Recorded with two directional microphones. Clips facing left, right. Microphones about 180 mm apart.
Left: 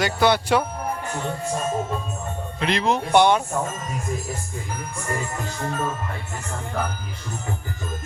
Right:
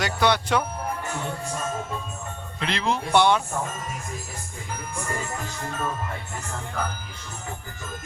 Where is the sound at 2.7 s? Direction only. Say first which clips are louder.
Left 4 dB; 20° left (ahead or behind).